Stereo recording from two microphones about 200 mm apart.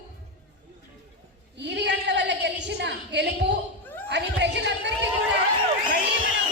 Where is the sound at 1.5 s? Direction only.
60° right (ahead or behind).